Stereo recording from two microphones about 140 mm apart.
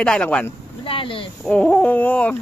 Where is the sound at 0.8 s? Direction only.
40° left (ahead or behind).